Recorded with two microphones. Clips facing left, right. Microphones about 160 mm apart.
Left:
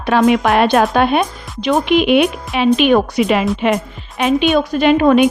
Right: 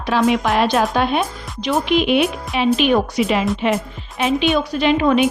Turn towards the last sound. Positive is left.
turn(degrees=50)  # may be behind; listen again after turning